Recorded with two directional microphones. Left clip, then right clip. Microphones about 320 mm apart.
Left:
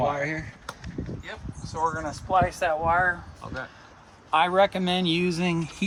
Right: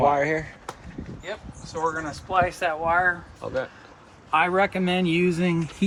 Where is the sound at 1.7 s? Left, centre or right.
Left.